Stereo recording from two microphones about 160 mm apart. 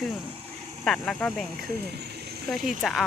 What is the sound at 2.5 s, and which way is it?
Speech, centre (ahead or behind).